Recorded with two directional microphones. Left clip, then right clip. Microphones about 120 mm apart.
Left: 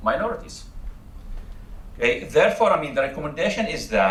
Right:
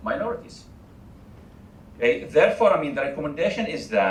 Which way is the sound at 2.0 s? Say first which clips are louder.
Even; 35° left (ahead or behind).